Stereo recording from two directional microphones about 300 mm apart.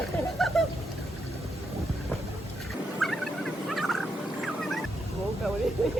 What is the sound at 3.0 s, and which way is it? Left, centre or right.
Fowl, centre.